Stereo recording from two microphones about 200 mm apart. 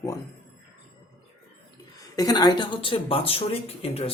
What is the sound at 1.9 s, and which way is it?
A woman's voice, 20° left (ahead or behind).